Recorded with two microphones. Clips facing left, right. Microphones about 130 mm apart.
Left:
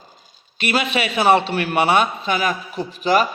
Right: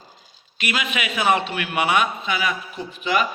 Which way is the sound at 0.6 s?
35° left (ahead or behind).